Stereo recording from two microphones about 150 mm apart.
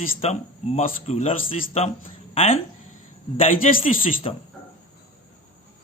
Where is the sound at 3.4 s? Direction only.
60° left (ahead or behind).